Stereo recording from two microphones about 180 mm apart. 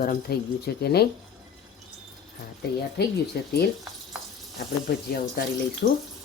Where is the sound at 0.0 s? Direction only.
55° left (ahead or behind).